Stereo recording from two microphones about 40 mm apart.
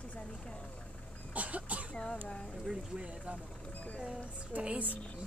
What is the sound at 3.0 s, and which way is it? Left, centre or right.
Speech, right.